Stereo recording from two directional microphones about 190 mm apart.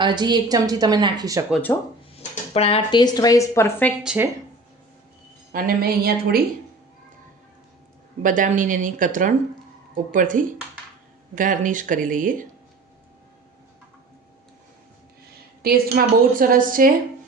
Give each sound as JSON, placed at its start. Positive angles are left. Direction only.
{"t": 0.0, "sound": "a woman's voice", "side_deg": -25}
{"t": 1.7, "sound": "speech", "side_deg": 15}
{"t": 2.1, "sound": "speech", "side_deg": 35}
{"t": 4.0, "sound": "speech", "side_deg": -5}
{"t": 5.5, "sound": "a woman's voice", "side_deg": -50}
{"t": 8.2, "sound": "a woman's voice", "side_deg": -45}
{"t": 15.6, "sound": "a woman's voice", "side_deg": -50}